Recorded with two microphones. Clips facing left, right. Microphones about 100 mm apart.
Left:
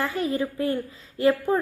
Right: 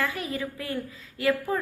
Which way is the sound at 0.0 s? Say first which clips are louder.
Left 5 dB; 30° left (ahead or behind).